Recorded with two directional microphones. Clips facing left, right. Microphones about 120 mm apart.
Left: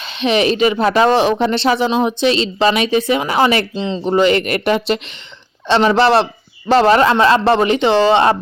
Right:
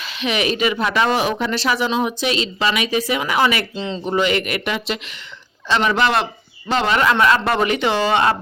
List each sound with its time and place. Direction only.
0.0 s speech: 30° left (ahead or behind)
3.8 s speech: 20° left (ahead or behind)
4.0 s speech: 35° left (ahead or behind)
5.6 s speech: 30° left (ahead or behind)